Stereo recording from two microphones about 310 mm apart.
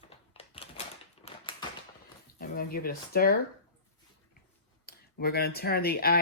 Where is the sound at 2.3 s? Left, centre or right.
Left.